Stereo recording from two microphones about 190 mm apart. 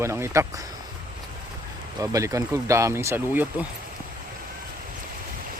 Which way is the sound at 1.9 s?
15° right (ahead or behind).